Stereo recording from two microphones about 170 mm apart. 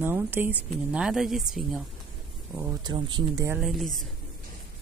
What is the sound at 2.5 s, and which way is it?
Speech, 15° right (ahead or behind).